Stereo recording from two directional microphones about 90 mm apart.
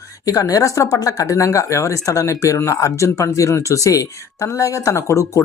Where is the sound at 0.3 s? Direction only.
40° left (ahead or behind).